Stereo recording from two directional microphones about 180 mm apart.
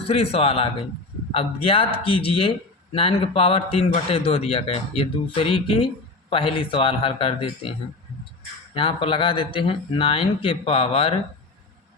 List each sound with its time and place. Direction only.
0.0 s a man's voice: 35° left (ahead or behind)